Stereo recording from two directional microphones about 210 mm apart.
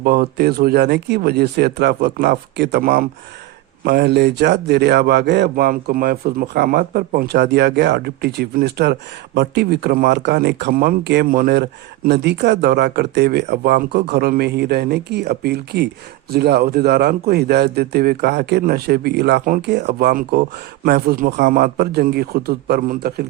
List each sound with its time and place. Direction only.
0.0 s speech: 45° right (ahead or behind)